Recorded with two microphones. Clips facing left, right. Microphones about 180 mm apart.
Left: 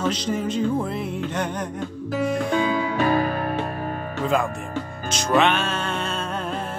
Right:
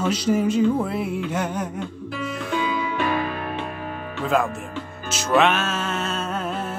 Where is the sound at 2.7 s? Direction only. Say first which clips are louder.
Left 3 dB; 40° left (ahead or behind).